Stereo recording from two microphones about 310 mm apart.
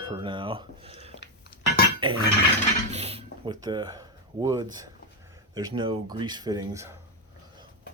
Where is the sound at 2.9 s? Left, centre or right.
Centre.